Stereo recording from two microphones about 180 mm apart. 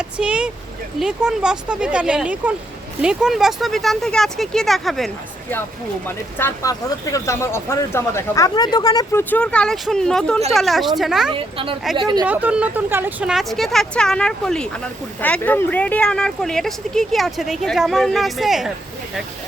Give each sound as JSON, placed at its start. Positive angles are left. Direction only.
{"t": 0.0, "sound": "speech", "side_deg": -5}
{"t": 6.1, "sound": "speech", "side_deg": 15}
{"t": 9.3, "sound": "speech", "side_deg": 5}
{"t": 11.3, "sound": "speech", "side_deg": -30}
{"t": 12.2, "sound": "speech", "side_deg": -10}